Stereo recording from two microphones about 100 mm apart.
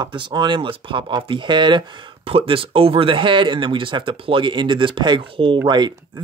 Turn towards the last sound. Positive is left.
turn(degrees=-45)  # may be behind; listen again after turning